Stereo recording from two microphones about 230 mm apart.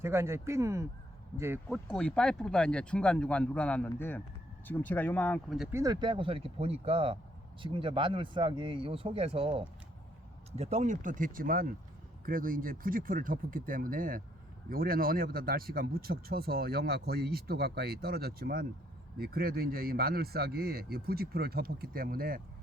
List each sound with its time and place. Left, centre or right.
0.0 s speech: centre
1.7 s speech: centre
5.5 s speech: centre; by 22.4 s right